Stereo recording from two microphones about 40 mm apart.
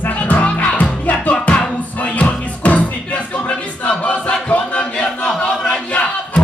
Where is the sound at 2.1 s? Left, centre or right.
Left.